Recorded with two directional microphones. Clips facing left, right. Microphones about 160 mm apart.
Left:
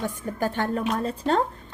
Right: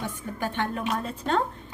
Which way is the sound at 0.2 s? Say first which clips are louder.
Left 2 dB; 40° left (ahead or behind).